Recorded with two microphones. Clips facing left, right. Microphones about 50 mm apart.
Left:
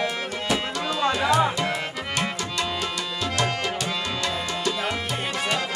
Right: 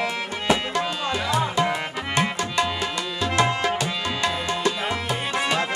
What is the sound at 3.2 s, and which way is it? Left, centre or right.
Music, right.